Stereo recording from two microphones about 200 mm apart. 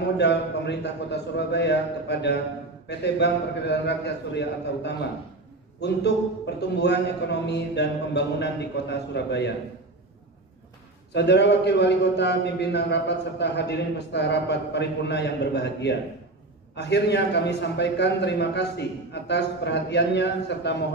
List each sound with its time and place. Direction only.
0.0 s a man's voice: 60° left (ahead or behind)
11.1 s a man's voice: 60° left (ahead or behind)